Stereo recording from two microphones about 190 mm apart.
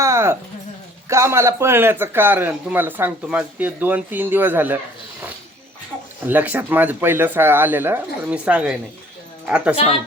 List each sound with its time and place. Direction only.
0.0 s a sound: 15° right (ahead or behind)
1.0 s a man's voice: 15° right (ahead or behind)
6.2 s a man's voice: 10° right (ahead or behind)
9.7 s a woman's voice: 30° left (ahead or behind)